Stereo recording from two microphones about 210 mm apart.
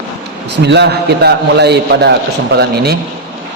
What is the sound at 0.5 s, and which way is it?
A man's voice, 55° right (ahead or behind).